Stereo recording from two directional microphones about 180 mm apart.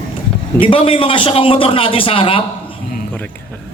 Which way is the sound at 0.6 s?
30° left (ahead or behind).